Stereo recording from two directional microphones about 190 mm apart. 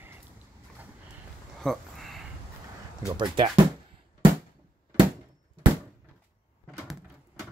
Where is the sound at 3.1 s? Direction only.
25° right (ahead or behind).